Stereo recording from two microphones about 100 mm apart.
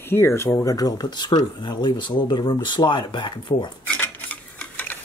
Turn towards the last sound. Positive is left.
turn(degrees=15)  # may be behind; listen again after turning